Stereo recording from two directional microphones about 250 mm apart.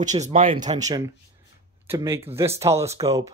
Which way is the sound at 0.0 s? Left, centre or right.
Right.